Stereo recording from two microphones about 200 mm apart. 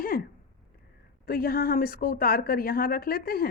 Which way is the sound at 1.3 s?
50° left (ahead or behind).